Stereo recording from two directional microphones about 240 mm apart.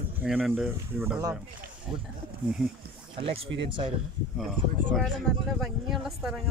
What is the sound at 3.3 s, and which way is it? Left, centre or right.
Speech, right.